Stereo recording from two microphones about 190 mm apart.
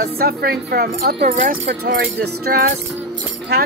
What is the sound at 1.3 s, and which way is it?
Music, 45° right (ahead or behind).